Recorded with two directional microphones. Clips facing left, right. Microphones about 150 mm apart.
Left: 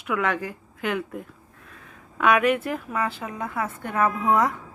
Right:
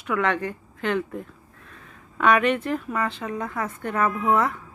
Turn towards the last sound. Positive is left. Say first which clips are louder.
# even
turn(degrees=15)  # may be behind; listen again after turning